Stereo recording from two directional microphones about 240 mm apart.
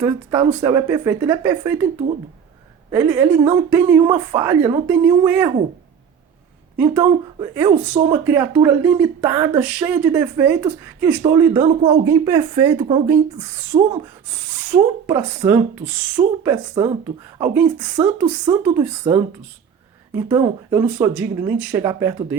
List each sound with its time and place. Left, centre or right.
0.0 s speech: centre
2.9 s speech: centre
6.7 s speech: centre
13.7 s speech: centre
14.3 s speech: centre